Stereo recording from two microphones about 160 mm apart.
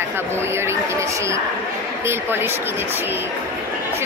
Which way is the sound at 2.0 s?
15° right (ahead or behind).